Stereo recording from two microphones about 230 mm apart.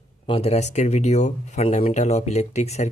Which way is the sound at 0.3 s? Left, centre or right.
Left.